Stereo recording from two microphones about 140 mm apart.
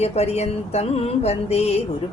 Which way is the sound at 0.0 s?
50° left (ahead or behind).